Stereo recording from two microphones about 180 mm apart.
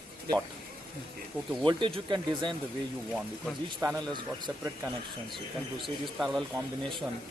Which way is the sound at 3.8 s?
20° right (ahead or behind).